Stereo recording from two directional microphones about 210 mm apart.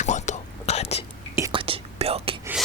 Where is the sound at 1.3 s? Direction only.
20° right (ahead or behind).